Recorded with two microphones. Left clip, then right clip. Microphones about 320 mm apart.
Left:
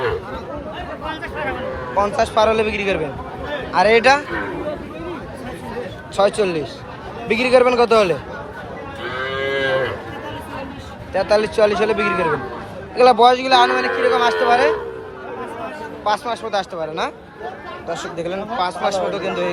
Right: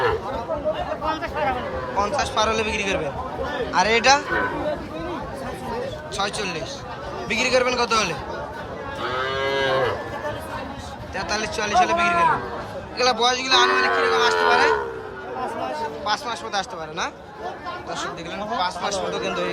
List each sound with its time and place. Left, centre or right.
1.0 s a sound: right
2.0 s speech: centre
6.1 s speech: centre
9.3 s moo: right
11.1 s speech: centre
16.0 s speech: centre